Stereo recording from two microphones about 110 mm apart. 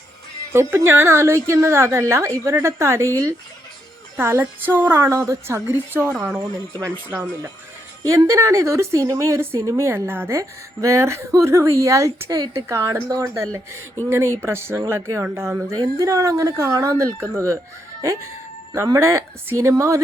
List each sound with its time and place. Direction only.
0.5 s speech: 25° right (ahead or behind)
4.2 s speech: 20° right (ahead or behind)
6.4 s speech: 30° right (ahead or behind)
8.0 s speech: 30° right (ahead or behind)
18.9 s speech: 25° right (ahead or behind)